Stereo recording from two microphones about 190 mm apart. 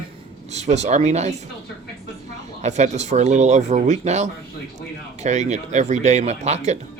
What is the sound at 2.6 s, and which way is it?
Speech, 35° right (ahead or behind).